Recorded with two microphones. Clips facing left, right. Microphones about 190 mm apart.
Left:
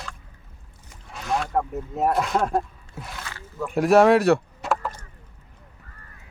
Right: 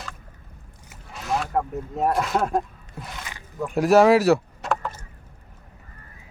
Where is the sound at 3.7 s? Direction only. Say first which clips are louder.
Even; centre (ahead or behind).